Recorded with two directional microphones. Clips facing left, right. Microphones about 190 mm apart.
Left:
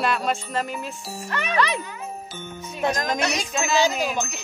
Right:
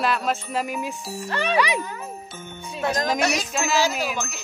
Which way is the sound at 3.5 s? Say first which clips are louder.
Left 4 dB; centre (ahead or behind).